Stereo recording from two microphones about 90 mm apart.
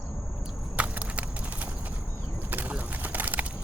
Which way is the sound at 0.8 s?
15° right (ahead or behind).